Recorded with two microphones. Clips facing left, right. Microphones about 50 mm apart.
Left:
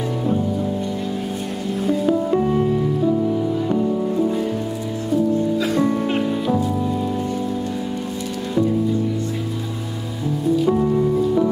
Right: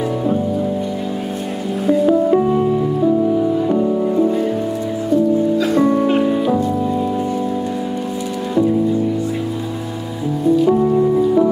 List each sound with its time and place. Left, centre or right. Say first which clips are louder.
1.9 s music: right 6 dB; centre
4.2 s music: right 5 dB; centre
5.6 s music: right 5 dB; centre
10.5 s music: right 4 dB; centre